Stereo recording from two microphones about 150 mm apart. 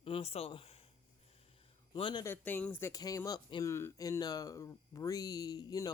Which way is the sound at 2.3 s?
10° left (ahead or behind).